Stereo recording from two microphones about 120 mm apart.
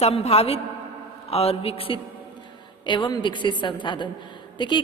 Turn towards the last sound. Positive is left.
turn(degrees=40)  # may be behind; listen again after turning